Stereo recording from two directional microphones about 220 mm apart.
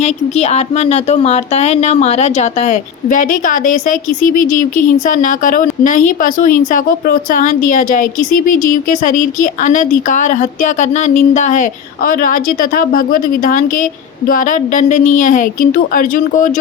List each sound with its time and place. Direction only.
0.0 s a woman's voice: 30° left (ahead or behind)